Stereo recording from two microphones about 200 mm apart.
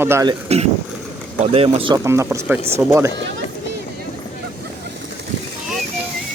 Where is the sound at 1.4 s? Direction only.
30° right (ahead or behind).